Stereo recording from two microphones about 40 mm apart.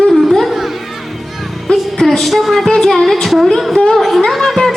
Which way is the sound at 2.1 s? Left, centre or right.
Centre.